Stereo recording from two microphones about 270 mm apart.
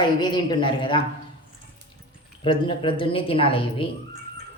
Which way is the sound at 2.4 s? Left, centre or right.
Centre.